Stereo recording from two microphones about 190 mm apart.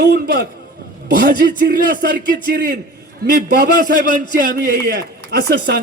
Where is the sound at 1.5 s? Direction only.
45° right (ahead or behind).